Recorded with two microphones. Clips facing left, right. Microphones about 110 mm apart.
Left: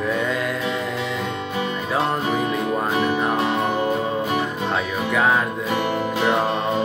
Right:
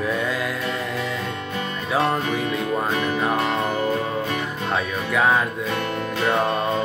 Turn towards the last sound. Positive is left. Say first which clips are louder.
# left 1 dB
turn(degrees=0)  # may be behind; listen again after turning